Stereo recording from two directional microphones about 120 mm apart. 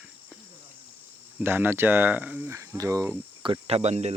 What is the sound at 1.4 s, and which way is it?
Speech, 15° right (ahead or behind).